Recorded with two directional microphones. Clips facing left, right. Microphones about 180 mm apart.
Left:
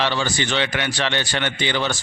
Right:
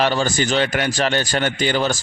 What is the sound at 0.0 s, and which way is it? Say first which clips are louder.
A man's voice: right 4 dB; 45° right (ahead or behind).